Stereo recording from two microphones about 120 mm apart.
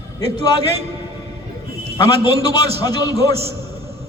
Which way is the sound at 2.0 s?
35° left (ahead or behind).